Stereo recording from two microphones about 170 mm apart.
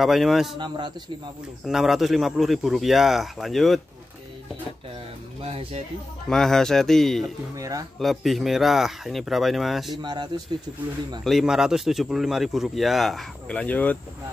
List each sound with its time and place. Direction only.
0.0 s speech: centre (ahead or behind)
0.6 s a man's voice: 25° right (ahead or behind)
1.6 s speech: centre (ahead or behind)
5.4 s speech: 35° right (ahead or behind)
6.2 s speech: 5° left (ahead or behind)
7.5 s a man's voice: 20° right (ahead or behind)
8.0 s speech: centre (ahead or behind)
10.0 s a man's voice: 25° right (ahead or behind)
11.2 s speech: centre (ahead or behind)